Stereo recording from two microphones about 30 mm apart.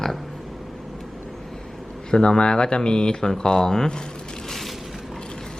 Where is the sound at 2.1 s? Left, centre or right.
Left.